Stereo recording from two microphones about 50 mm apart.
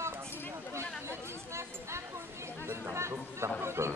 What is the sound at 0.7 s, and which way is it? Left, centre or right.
Chatter, right.